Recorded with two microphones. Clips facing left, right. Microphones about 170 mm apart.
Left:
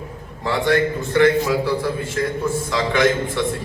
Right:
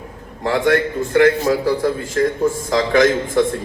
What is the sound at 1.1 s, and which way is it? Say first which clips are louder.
A man's voice: right 2 dB; 40° right (ahead or behind).